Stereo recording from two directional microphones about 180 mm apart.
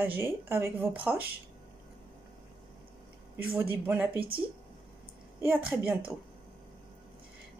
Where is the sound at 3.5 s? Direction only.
10° right (ahead or behind).